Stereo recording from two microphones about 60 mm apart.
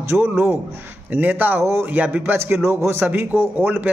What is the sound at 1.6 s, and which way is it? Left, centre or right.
Speech, right.